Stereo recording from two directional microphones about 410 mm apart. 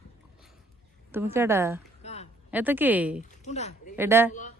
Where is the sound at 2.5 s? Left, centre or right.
Centre.